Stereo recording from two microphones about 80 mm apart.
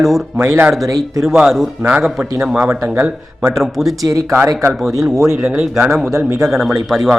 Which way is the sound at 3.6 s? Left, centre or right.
Centre.